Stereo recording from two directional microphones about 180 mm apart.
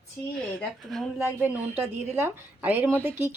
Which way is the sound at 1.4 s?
10° right (ahead or behind).